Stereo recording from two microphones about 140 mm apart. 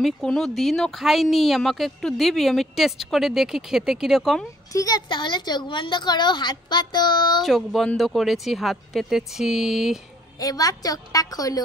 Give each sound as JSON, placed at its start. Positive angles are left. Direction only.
{"t": 0.0, "sound": "speech", "side_deg": 5}
{"t": 4.7, "sound": "a woman's voice", "side_deg": 30}
{"t": 7.4, "sound": "speech", "side_deg": 0}
{"t": 10.4, "sound": "a woman's voice", "side_deg": 25}